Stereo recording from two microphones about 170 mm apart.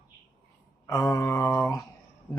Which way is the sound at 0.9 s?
20° left (ahead or behind).